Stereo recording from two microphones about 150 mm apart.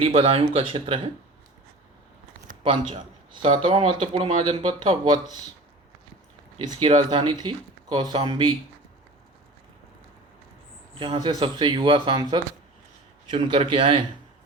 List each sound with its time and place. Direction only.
0.0 s speech: 40° right (ahead or behind)
2.6 s speech: 35° right (ahead or behind)
3.4 s speech: 45° right (ahead or behind)
6.8 s speech: 35° right (ahead or behind)
11.0 s speech: 30° right (ahead or behind)